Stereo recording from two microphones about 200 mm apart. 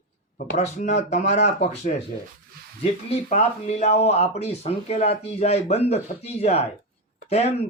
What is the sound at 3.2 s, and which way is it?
Speech, 35° left (ahead or behind).